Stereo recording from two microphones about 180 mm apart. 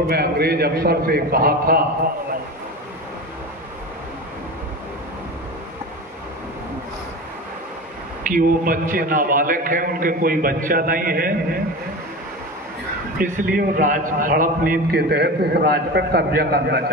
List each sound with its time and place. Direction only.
0.1 s a man's voice: 60° right (ahead or behind)
8.3 s a man's voice: 50° right (ahead or behind)
13.2 s a man's voice: 50° right (ahead or behind)